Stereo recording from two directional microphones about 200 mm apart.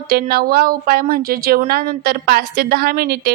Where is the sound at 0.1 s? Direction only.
50° right (ahead or behind).